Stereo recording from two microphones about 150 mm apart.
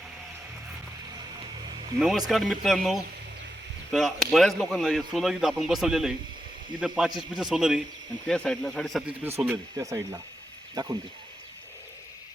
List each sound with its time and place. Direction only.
2.0 s speech: 5° right (ahead or behind)
9.2 s speech: 10° right (ahead or behind)